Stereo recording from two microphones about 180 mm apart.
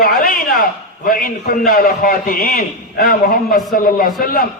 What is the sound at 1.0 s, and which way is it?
A man's voice, 55° left (ahead or behind).